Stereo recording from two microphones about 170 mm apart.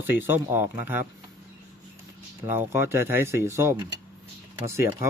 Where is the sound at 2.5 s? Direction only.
10° right (ahead or behind).